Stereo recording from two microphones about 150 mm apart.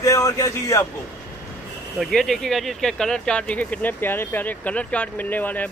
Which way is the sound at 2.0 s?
Centre (ahead or behind).